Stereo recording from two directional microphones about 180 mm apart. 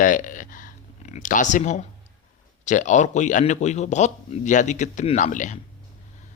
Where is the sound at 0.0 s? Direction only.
45° left (ahead or behind).